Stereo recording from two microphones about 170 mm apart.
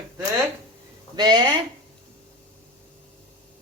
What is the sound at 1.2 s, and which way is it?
Speech, 25° right (ahead or behind).